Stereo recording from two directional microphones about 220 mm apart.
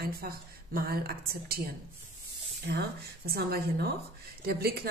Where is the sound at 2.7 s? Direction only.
50° right (ahead or behind).